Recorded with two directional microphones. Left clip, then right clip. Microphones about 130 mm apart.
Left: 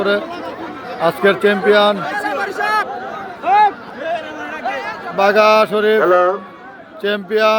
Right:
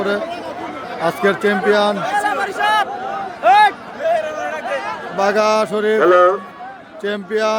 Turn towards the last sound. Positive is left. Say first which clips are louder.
# left 4 dB
turn(degrees=-10)  # may be behind; listen again after turning